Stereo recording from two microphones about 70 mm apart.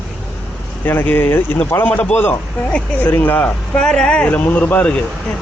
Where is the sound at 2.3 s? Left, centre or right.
Centre.